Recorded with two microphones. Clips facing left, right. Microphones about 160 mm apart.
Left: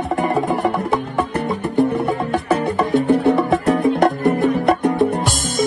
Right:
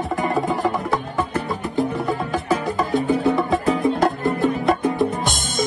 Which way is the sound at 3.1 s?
70° left (ahead or behind).